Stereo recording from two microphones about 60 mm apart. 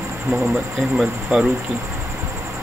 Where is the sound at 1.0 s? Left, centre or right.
Centre.